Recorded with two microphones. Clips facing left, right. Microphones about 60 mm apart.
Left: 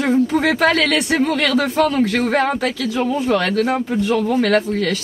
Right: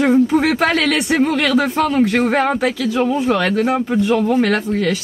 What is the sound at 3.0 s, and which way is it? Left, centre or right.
Speech, right.